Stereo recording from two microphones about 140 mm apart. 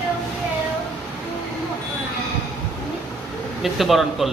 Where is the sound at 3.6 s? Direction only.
Centre (ahead or behind).